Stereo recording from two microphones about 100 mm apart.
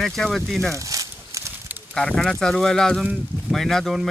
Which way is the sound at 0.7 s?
35° right (ahead or behind).